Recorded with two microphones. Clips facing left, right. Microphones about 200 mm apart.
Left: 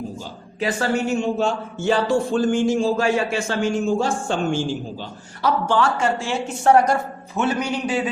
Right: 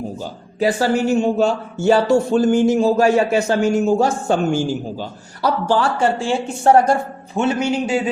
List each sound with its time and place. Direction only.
0.2 s a man's voice: 35° right (ahead or behind)